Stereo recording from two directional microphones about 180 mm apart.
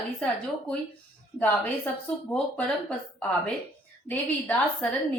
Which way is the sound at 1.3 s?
10° left (ahead or behind).